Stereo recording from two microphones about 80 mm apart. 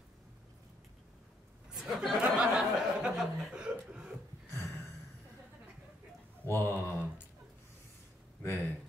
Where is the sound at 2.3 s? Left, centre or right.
Centre.